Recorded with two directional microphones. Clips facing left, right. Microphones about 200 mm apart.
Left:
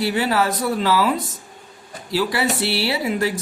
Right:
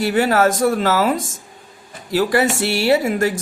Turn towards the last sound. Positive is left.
turn(degrees=-45)  # may be behind; listen again after turning